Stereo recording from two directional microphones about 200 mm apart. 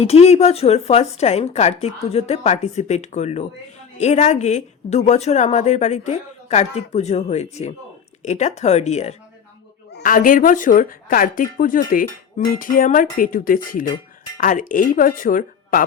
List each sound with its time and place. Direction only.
0.0 s a woman's voice: 30° left (ahead or behind)